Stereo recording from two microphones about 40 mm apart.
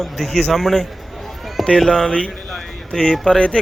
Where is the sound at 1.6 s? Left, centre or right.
Centre.